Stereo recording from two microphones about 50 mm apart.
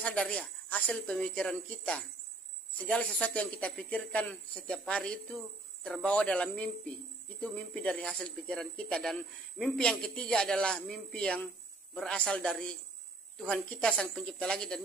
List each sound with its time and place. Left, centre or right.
0.0 s speech: left
0.9 s speech: centre
3.2 s speech: left
9.0 s a man's voice: centre